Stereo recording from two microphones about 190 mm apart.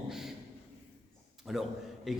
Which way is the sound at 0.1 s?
Centre (ahead or behind).